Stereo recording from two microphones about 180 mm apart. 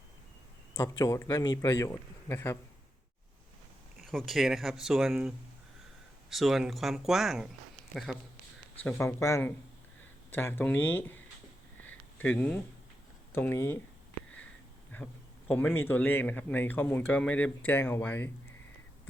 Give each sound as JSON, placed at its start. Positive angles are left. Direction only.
{"t": 0.8, "sound": "a man's voice", "side_deg": 20}
{"t": 3.9, "sound": "speech", "side_deg": 0}
{"t": 6.3, "sound": "a man's voice", "side_deg": 0}
{"t": 11.8, "sound": "a sound", "side_deg": 10}
{"t": 13.3, "sound": "a man's voice", "side_deg": 15}
{"t": 14.9, "sound": "a man's voice", "side_deg": 10}